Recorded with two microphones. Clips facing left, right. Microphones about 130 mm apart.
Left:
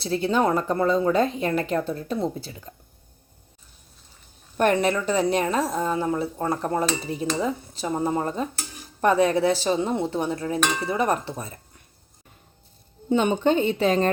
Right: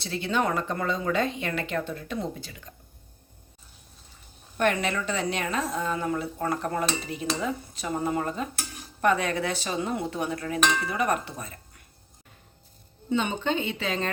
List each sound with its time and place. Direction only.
0.0 s a woman's voice: 40° left (ahead or behind)
4.5 s a woman's voice: 40° left (ahead or behind)
13.1 s a woman's voice: 45° left (ahead or behind)